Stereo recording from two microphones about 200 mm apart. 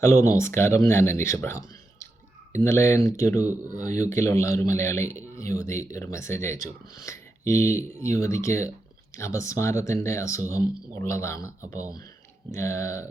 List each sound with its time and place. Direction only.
0.2 s speech: 15° left (ahead or behind)
2.6 s speech: 15° left (ahead or behind)
3.4 s speech: 10° right (ahead or behind)
3.8 s speech: 15° left (ahead or behind)
12.5 s speech: 15° left (ahead or behind)